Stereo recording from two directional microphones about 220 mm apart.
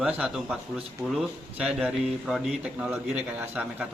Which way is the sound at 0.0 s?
5° right (ahead or behind).